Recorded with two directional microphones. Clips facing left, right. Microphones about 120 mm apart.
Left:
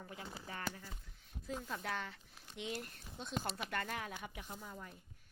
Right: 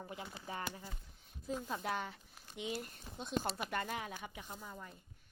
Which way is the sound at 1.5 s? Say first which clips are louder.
Right 3 dB; 20° right (ahead or behind).